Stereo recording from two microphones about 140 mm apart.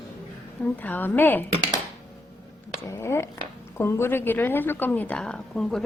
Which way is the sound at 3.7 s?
15° left (ahead or behind).